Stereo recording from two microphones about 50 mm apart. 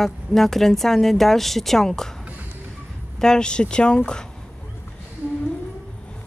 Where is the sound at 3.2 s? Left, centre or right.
Centre.